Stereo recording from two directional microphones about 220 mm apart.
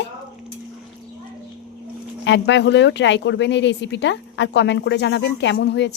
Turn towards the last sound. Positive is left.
turn(degrees=50)  # may be behind; listen again after turning